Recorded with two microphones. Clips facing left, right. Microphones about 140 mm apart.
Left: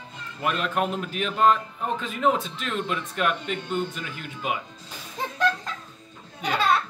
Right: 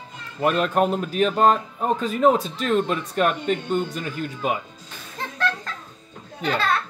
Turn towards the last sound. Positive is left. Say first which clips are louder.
# right 1 dB
turn(degrees=15)  # may be behind; listen again after turning